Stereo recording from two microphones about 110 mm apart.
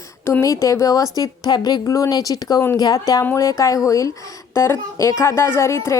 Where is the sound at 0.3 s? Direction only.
25° left (ahead or behind).